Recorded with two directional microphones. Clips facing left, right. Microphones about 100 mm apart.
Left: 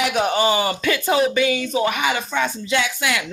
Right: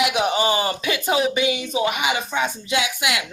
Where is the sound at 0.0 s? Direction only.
10° right (ahead or behind).